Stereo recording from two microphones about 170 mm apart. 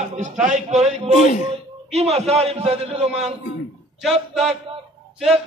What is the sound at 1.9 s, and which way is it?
A man's voice, 40° right (ahead or behind).